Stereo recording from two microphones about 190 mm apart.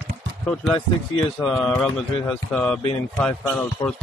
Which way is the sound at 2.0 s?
5° left (ahead or behind).